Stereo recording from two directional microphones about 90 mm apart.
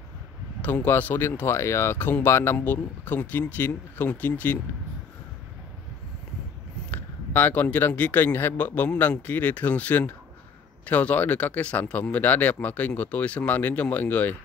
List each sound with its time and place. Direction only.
0.6 s speech: 20° left (ahead or behind)
6.9 s speech: 20° left (ahead or behind)